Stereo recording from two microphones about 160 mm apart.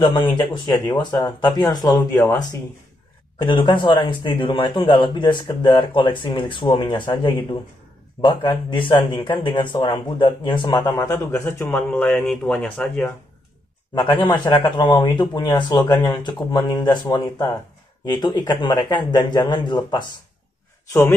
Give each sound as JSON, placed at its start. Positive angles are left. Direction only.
{"t": 0.1, "sound": "speech", "side_deg": 30}
{"t": 10.9, "sound": "speech", "side_deg": 15}
{"t": 13.9, "sound": "speech", "side_deg": 30}
{"t": 15.7, "sound": "speech", "side_deg": 10}
{"t": 16.0, "sound": "speech", "side_deg": 25}